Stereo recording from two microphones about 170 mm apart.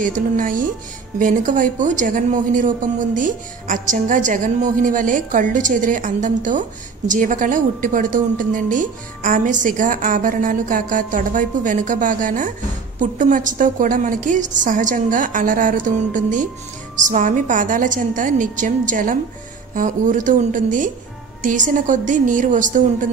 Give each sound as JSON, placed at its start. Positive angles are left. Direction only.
{"t": 0.0, "sound": "a woman's voice", "side_deg": -50}